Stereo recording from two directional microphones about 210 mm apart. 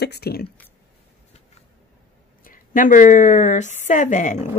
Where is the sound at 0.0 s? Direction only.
50° left (ahead or behind).